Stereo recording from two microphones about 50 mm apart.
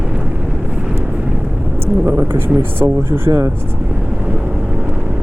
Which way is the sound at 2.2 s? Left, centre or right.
Right.